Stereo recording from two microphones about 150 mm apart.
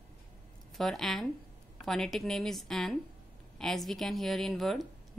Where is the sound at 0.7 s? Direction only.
Centre (ahead or behind).